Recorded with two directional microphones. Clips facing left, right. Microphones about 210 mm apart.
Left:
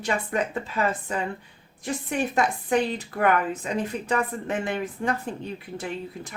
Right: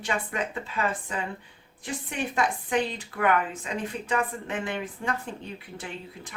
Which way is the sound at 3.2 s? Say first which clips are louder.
Left 2 dB; 40° left (ahead or behind).